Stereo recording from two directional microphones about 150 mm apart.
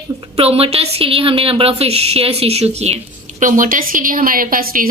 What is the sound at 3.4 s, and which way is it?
A woman's voice, 60° right (ahead or behind).